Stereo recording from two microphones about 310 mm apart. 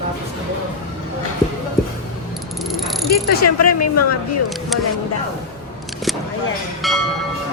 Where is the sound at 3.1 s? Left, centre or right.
Left.